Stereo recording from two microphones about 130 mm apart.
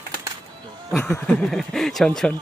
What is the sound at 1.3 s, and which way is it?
Speech, centre (ahead or behind).